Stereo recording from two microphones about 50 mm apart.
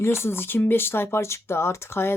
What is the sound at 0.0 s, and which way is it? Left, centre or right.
Speech, left.